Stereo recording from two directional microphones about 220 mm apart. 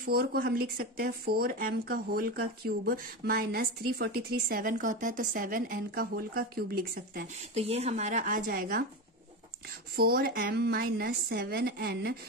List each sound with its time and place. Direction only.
0.0 s speech: 45° right (ahead or behind)
7.5 s speech: 30° right (ahead or behind)
9.9 s speech: 45° right (ahead or behind)